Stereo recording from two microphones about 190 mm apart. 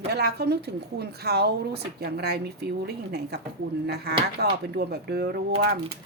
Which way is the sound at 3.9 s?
55° right (ahead or behind).